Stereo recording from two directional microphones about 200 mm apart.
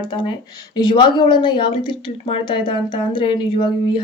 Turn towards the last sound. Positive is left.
turn(degrees=25)  # may be behind; listen again after turning